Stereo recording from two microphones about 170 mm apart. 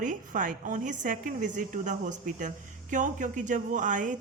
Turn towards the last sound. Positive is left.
turn(degrees=-50)  # may be behind; listen again after turning